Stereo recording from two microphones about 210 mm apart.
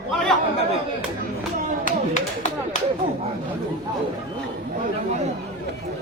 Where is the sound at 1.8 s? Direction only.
40° left (ahead or behind).